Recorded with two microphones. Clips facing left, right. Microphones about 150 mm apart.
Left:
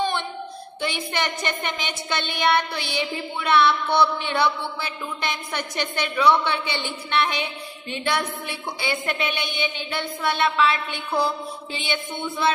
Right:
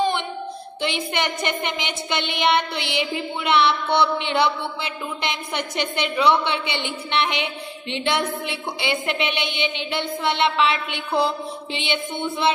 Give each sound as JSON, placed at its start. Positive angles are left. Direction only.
{"t": 0.7, "sound": "child singing", "side_deg": -25}